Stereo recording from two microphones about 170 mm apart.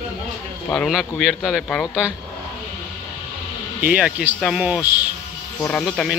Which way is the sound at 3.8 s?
10° right (ahead or behind).